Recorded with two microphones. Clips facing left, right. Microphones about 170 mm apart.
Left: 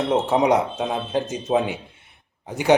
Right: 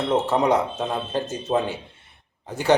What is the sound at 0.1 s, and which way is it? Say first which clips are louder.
Speech: left 1 dB; 15° left (ahead or behind).